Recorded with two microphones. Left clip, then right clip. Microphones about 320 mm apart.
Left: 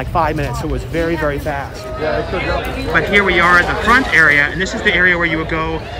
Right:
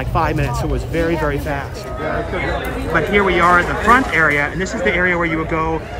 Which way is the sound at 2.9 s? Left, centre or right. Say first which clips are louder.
Left 2 dB; centre.